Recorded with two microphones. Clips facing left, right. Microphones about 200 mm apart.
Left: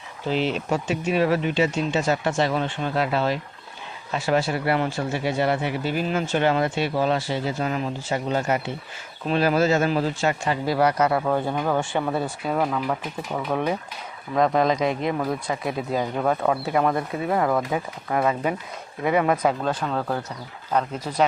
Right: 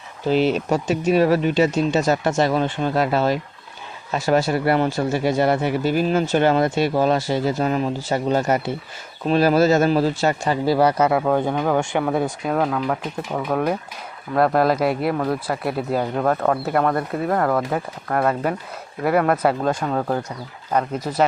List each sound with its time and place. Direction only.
0.3 s speech: 40° right (ahead or behind)
11.3 s speech: 15° right (ahead or behind)
12.5 s speech: centre (ahead or behind)
16.0 s speech: 5° left (ahead or behind); by 20.1 s 15° right (ahead or behind)